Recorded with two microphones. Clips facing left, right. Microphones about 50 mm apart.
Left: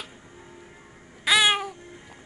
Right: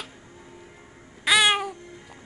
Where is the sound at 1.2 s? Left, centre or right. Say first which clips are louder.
Right 1 dB; centre.